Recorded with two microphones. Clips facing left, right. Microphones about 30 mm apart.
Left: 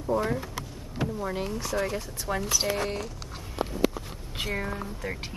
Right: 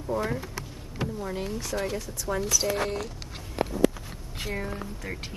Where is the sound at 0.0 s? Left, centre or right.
Centre.